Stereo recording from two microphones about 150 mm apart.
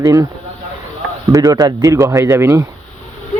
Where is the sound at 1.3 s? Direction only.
25° right (ahead or behind).